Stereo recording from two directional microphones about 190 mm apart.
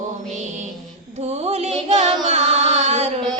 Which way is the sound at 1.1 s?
35° right (ahead or behind).